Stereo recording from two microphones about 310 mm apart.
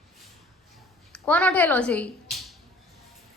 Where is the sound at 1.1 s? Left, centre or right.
Centre.